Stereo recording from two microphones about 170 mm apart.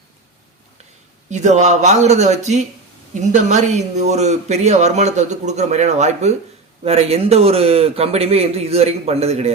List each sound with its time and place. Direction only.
1.3 s speech: 45° right (ahead or behind)